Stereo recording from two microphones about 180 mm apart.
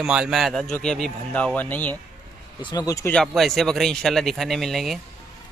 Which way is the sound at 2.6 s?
20° left (ahead or behind).